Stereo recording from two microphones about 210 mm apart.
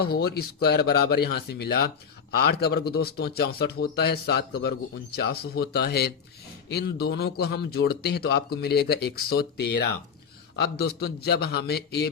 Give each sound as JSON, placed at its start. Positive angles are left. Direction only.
{"t": 0.0, "sound": "a man's voice", "side_deg": 50}